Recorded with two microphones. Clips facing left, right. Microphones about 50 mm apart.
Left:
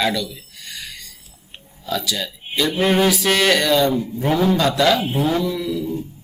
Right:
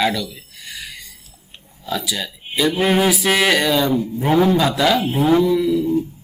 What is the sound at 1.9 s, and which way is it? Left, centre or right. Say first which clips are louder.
Speech: even; centre.